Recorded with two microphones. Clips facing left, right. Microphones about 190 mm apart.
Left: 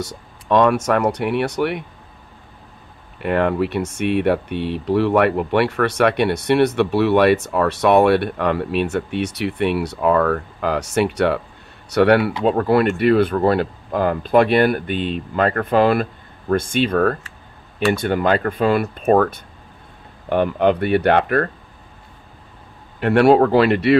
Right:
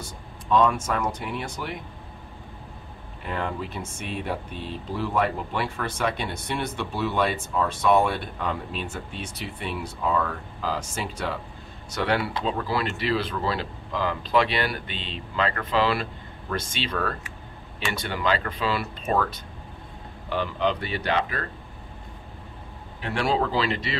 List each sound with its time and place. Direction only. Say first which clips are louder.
0.0 s speech: left 9 dB; 75° left (ahead or behind)
3.2 s speech: left 12 dB; 65° left (ahead or behind)
22.9 s speech: left 12 dB; 65° left (ahead or behind)